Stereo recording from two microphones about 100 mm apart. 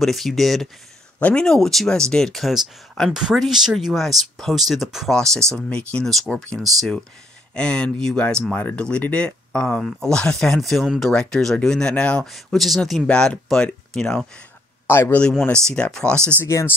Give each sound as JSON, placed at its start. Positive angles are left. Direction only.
{"t": 0.0, "sound": "speech", "side_deg": 0}
{"t": 14.9, "sound": "speech", "side_deg": 20}
{"t": 15.5, "sound": "speech", "side_deg": 10}
{"t": 16.4, "sound": "speech", "side_deg": 25}